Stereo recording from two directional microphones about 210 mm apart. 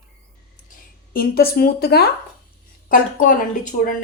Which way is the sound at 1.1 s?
45° left (ahead or behind).